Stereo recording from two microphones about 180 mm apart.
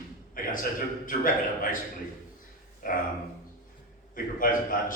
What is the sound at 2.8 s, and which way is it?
Speech, 50° left (ahead or behind).